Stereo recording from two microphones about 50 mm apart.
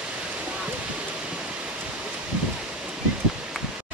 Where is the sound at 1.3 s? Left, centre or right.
Right.